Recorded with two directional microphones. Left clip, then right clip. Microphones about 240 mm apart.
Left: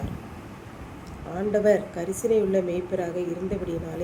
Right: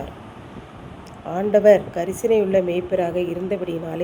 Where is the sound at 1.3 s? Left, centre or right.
Centre.